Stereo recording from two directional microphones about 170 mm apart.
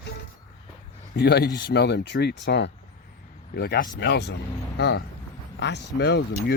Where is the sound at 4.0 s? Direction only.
90° left.